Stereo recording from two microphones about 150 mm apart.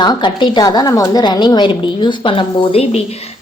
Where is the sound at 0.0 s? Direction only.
30° left (ahead or behind).